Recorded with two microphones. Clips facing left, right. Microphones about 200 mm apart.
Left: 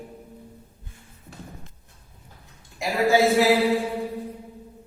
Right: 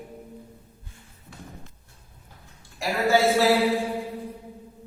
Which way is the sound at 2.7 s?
15° left (ahead or behind).